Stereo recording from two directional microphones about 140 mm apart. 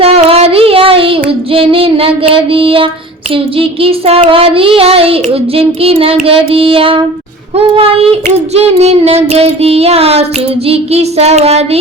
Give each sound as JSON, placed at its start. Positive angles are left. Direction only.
{"t": 0.0, "sound": "child singing", "side_deg": -45}